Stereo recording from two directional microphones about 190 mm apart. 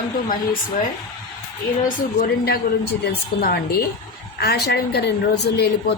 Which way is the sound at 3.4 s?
55° left (ahead or behind).